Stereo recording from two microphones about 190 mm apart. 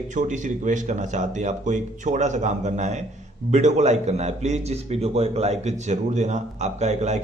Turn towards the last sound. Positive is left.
turn(degrees=-35)  # may be behind; listen again after turning